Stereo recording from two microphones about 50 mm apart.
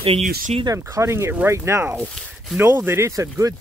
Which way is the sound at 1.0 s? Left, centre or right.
Right.